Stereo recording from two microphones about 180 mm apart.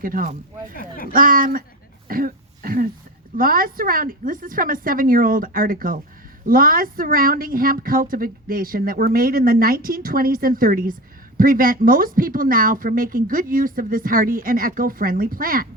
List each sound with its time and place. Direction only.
0.0 s a woman's voice: 50° right (ahead or behind)
0.7 s speech: 50° left (ahead or behind)
1.1 s a woman's voice: 50° right (ahead or behind)